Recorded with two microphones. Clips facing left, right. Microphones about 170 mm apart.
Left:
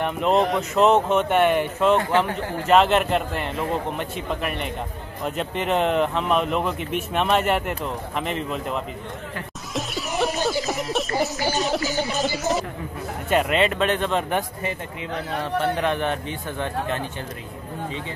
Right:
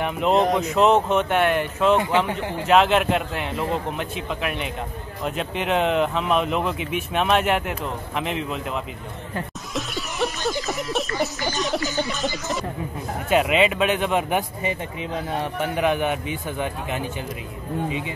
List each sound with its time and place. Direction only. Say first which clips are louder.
0.0 s speech: even; centre (ahead or behind)
2.0 s speech: even; 15° right (ahead or behind)
2.7 s speech: even; centre (ahead or behind)
9.8 s music: left 1 dB; centre (ahead or behind)
10.4 s a sound: left 2 dB; centre (ahead or behind)
11.1 s a sound: left 2 dB; 40° left (ahead or behind)
13.3 s speech: right 1 dB; 5° right (ahead or behind)